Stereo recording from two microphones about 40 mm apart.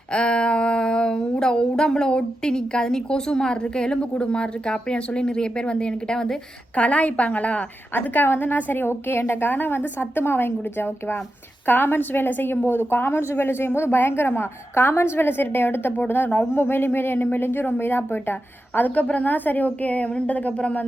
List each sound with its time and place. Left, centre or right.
0.1 s a sound: left
4.2 s speech: left
6.7 s a woman's voice: left
7.9 s a woman's voice: left
8.3 s a woman's voice: left
11.6 s a woman's voice: left
16.5 s a woman's voice: left